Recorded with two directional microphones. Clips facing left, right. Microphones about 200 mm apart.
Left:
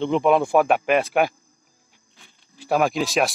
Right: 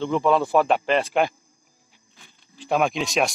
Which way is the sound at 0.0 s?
20° left (ahead or behind).